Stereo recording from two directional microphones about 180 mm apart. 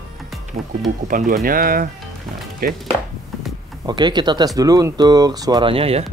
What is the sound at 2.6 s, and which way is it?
Chopping, 55° right (ahead or behind).